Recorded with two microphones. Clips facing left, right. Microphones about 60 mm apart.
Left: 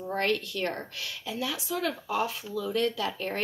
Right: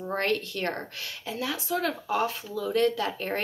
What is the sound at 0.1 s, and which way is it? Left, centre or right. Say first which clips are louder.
Speech: even; right.